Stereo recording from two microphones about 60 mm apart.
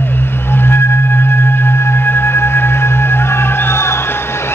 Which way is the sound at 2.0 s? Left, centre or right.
Left.